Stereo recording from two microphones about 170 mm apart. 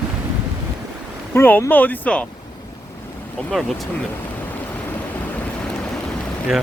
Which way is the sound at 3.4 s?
Centre (ahead or behind).